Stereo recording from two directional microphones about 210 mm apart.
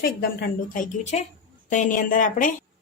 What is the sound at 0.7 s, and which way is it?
A woman's voice, 30° left (ahead or behind).